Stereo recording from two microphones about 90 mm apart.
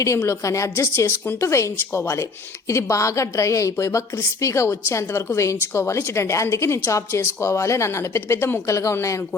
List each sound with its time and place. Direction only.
0.2 s a woman's voice: 35° left (ahead or behind)